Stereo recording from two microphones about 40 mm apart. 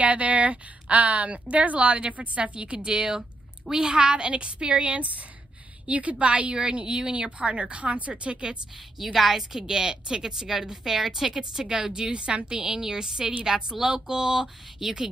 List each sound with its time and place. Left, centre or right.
0.0 s a woman's voice: right
8.9 s a woman's voice: centre
9.4 s a woman's voice: centre